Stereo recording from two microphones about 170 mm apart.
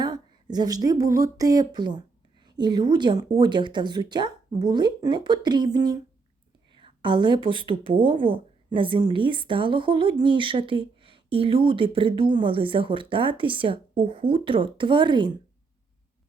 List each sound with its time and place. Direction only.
0.0 s speech: 25° right (ahead or behind)
6.7 s a sound: 30° right (ahead or behind)
7.7 s a woman's voice: 30° right (ahead or behind)